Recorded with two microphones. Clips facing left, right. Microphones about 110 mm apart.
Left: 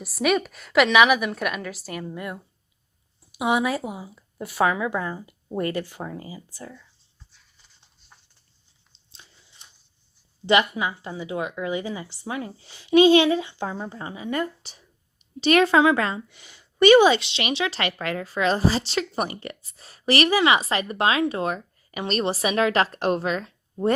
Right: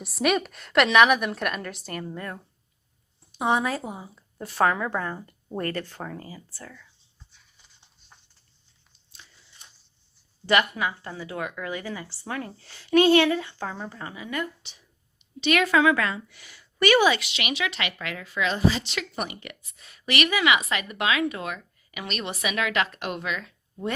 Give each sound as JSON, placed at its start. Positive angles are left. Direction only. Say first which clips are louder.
{"t": 0.0, "sound": "a woman's voice", "louder": "left 2 dB", "side_deg": 0}
{"t": 8.9, "sound": "biting", "louder": "even", "side_deg": 25}
{"t": 10.4, "sound": "a woman's voice", "louder": "left 2 dB", "side_deg": 20}